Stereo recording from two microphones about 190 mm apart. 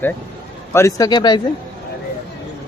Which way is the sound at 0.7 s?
15° left (ahead or behind).